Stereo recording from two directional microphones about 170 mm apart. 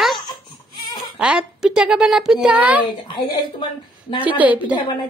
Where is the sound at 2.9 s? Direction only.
25° left (ahead or behind).